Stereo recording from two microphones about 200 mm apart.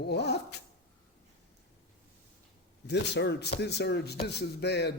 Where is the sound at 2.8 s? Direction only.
60° left (ahead or behind).